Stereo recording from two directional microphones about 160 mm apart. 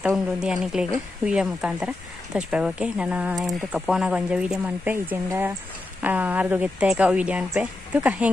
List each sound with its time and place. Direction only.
0.0 s speech: 5° right (ahead or behind)